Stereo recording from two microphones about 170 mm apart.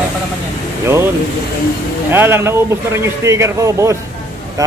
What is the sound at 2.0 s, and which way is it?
A man's voice, 15° right (ahead or behind).